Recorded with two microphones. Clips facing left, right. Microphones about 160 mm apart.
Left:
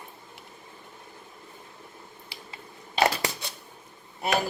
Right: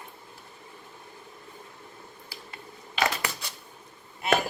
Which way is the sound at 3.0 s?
30° left (ahead or behind).